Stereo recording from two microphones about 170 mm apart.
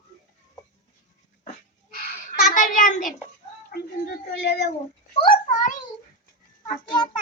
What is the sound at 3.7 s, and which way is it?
Speech, 70° left (ahead or behind).